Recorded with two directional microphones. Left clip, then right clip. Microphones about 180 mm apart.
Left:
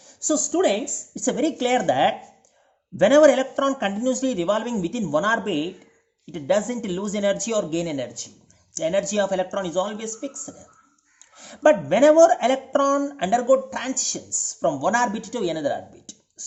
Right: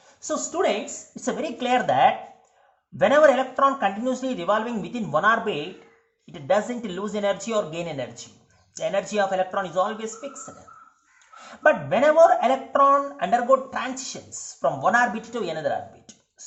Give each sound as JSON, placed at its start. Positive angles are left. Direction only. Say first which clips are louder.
{"t": 0.2, "sound": "a woman's voice", "louder": "left 3 dB", "side_deg": 45}